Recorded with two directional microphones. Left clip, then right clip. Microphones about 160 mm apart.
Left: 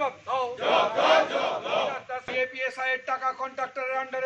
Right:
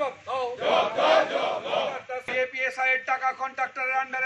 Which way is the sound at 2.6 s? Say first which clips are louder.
Right 4 dB; 45° left (ahead or behind).